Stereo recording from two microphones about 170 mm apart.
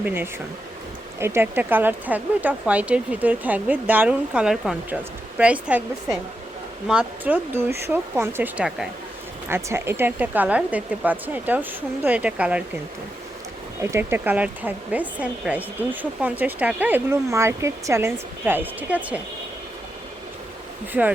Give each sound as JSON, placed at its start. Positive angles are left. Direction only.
{"t": 0.0, "sound": "speech", "side_deg": -10}
{"t": 6.8, "sound": "speech", "side_deg": -5}
{"t": 13.8, "sound": "speech", "side_deg": -15}